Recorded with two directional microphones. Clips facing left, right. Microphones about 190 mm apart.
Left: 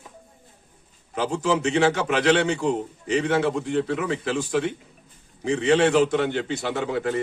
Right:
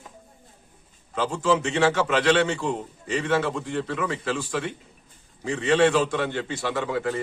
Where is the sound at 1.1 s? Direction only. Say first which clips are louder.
Even; 15° left (ahead or behind).